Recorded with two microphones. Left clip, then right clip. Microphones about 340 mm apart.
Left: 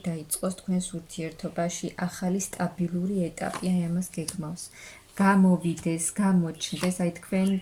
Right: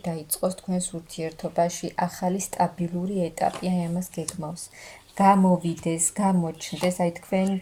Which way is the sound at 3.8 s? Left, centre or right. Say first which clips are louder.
Right 2 dB; centre.